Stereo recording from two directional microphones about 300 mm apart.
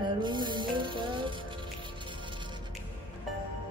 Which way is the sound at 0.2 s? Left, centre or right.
Centre.